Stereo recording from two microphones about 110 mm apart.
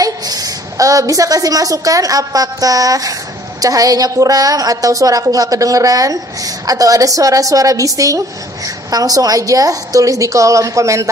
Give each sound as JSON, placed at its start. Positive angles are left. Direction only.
{"t": 0.0, "sound": "a woman's voice", "side_deg": -35}